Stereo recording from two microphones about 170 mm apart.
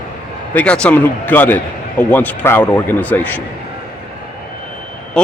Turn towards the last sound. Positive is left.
turn(degrees=5)  # may be behind; listen again after turning